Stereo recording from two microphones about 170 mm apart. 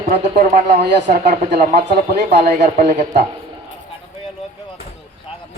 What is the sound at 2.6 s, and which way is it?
Speech, 45° right (ahead or behind).